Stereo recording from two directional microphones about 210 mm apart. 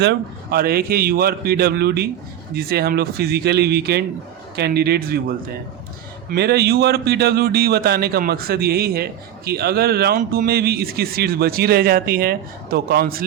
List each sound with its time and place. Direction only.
0.0 s a man's voice: 50° right (ahead or behind)
6.3 s a man's voice: 50° right (ahead or behind)